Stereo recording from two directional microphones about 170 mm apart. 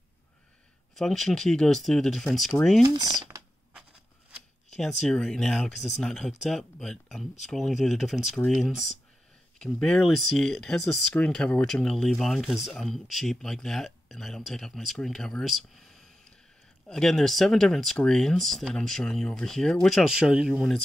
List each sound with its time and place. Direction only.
0.9 s speech: centre (ahead or behind)
2.8 s speech: 25° right (ahead or behind)
5.0 s speech: 5° left (ahead or behind)